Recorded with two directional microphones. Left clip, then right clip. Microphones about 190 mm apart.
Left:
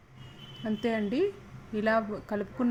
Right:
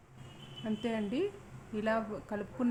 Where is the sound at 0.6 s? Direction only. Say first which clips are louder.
Left 6 dB; 15° left (ahead or behind).